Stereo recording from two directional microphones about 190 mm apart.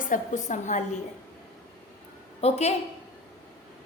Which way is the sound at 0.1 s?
40° left (ahead or behind).